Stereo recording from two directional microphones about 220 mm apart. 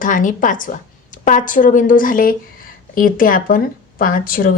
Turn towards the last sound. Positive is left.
turn(degrees=40)  # may be behind; listen again after turning